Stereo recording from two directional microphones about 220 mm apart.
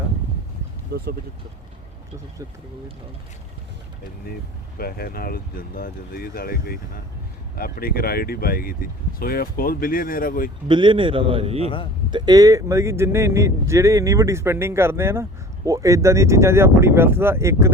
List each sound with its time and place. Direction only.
4.8 s speech: 45° left (ahead or behind)
10.7 s a man's voice: 20° right (ahead or behind)
11.6 s speech: 25° left (ahead or behind)
12.1 s speech: 20° right (ahead or behind)